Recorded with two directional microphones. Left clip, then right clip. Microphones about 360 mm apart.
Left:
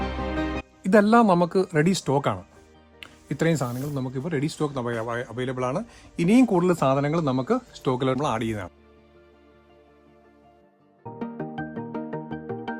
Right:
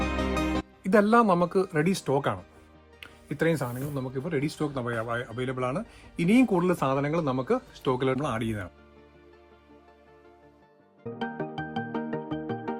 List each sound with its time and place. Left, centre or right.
0.8 s speech: left
11.3 s music: centre